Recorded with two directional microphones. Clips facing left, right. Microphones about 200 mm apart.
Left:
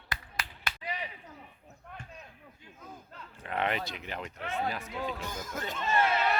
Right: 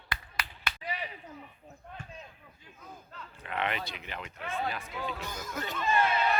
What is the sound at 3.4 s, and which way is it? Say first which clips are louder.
Speech: left 2 dB; 40° left (ahead or behind).